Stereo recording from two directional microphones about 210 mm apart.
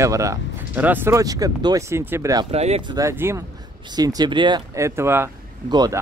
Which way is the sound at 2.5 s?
30° right (ahead or behind).